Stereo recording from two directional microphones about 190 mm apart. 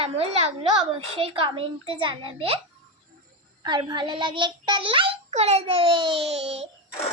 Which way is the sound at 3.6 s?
25° right (ahead or behind).